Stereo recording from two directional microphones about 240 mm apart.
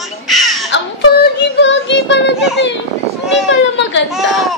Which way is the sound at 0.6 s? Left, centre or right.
Left.